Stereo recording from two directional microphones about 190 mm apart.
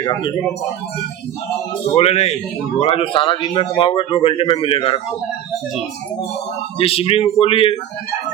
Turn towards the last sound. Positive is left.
turn(degrees=30)  # may be behind; listen again after turning